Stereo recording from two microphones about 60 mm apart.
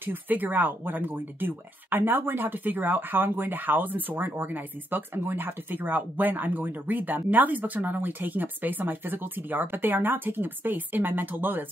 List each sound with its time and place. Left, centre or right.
0.0 s speech: right